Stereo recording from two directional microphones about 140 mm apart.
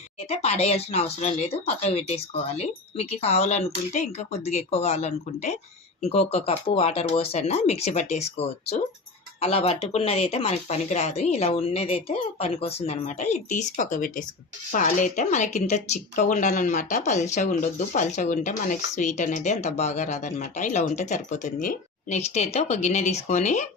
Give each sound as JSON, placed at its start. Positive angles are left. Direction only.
{"t": 0.6, "sound": "speech", "side_deg": 50}